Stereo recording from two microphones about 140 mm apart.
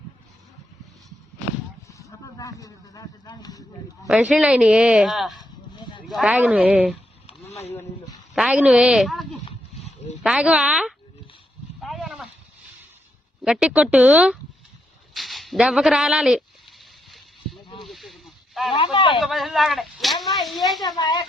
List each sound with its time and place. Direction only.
1.9 s a sound: 25° left (ahead or behind)
4.0 s a man's voice: 5° right (ahead or behind)
5.4 s a sound: 35° left (ahead or behind)
6.1 s speech: 5° right (ahead or behind)
8.4 s a man's voice: 5° right (ahead or behind)
10.2 s speech: 10° right (ahead or behind)
11.8 s a sound: centre (ahead or behind)
13.4 s speech: 5° right (ahead or behind)
17.8 s a sound: centre (ahead or behind)
18.7 s speech: 40° left (ahead or behind)
19.2 s a man's voice: centre (ahead or behind)
20.8 s speech: 30° left (ahead or behind)